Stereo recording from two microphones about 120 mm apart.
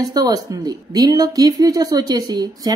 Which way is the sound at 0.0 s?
30° right (ahead or behind).